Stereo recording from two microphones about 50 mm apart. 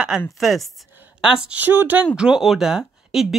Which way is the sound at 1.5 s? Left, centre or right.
Right.